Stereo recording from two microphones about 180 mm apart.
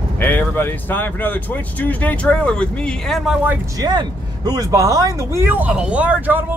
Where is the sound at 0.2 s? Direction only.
10° left (ahead or behind).